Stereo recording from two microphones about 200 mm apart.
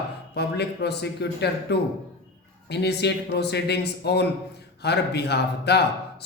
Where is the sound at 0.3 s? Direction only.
55° left (ahead or behind).